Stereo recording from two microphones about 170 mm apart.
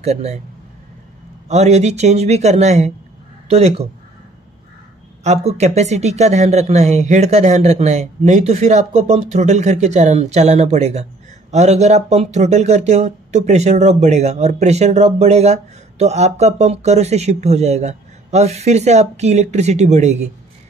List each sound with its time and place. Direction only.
0.0 s speech: 40° right (ahead or behind)
1.5 s speech: 40° right (ahead or behind)
5.2 s speech: 40° right (ahead or behind)